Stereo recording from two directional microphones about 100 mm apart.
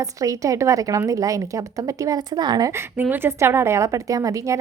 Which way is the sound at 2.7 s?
20° right (ahead or behind).